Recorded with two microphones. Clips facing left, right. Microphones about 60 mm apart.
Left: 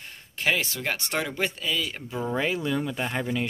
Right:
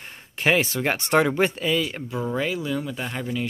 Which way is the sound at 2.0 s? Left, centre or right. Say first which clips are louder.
Right 3 dB; centre.